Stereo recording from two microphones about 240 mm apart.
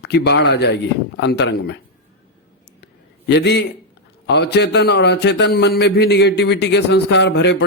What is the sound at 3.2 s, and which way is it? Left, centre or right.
A man's voice, left.